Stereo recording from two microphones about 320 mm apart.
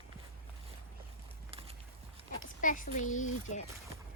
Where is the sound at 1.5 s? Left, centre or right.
Centre.